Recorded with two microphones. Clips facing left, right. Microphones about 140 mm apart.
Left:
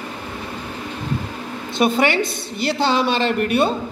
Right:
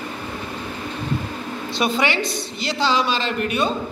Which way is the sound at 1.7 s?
50° left (ahead or behind).